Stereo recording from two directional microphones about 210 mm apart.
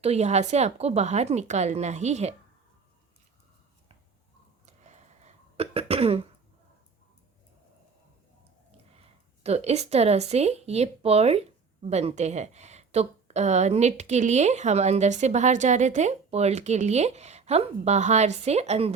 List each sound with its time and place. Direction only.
0.0 s speech: 30° right (ahead or behind)
4.6 s cough: 35° right (ahead or behind)
9.0 s speech: 30° right (ahead or behind)